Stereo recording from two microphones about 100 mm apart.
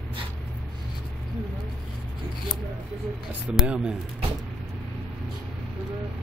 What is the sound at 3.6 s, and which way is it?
Speech, 10° right (ahead or behind).